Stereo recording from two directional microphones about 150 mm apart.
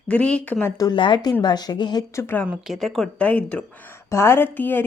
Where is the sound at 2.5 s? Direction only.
Centre (ahead or behind).